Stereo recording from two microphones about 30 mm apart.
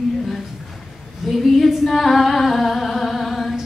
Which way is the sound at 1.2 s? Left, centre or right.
Centre.